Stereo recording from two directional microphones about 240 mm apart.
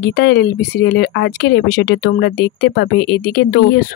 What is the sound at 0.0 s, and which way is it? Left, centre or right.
Speech, left.